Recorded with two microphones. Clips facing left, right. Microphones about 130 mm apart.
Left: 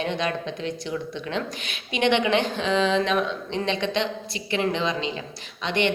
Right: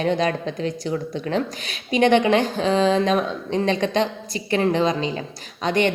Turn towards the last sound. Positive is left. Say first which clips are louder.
# right 4 dB
turn(degrees=-40)  # may be behind; listen again after turning